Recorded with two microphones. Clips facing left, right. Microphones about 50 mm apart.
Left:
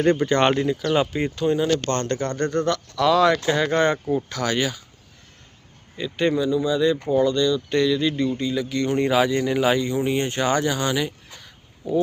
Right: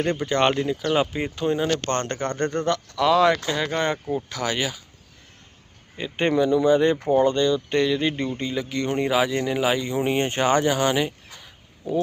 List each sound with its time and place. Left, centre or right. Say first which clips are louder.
0.0 s speech: left 3 dB; centre
0.9 s speech: even; centre
3.4 s speech: left 4 dB; centre
6.0 s speech: left 1 dB; right
6.3 s speech: right 3 dB; right; by 9.0 s centre
9.0 s speech: left 2 dB; centre
10.0 s speech: even; right
11.3 s crow: even; centre